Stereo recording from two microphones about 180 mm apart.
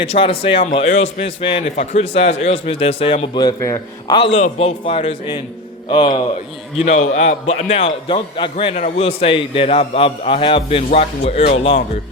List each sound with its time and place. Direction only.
0.0 s a man's voice: 30° left (ahead or behind)
4.2 s a man's voice: 35° left (ahead or behind)
6.8 s a man's voice: 40° left (ahead or behind)